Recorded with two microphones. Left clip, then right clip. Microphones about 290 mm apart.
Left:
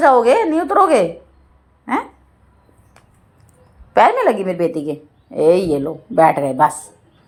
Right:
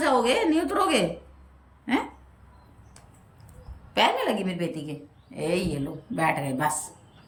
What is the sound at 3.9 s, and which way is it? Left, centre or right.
Speech, left.